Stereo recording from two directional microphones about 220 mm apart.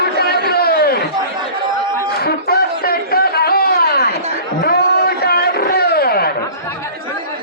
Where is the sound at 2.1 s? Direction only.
45° left (ahead or behind).